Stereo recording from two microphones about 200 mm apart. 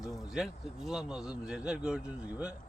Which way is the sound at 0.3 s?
Centre (ahead or behind).